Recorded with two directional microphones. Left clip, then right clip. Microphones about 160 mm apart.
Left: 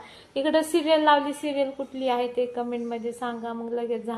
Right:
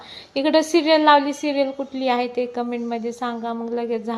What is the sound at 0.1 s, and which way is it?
A woman's voice, 25° right (ahead or behind).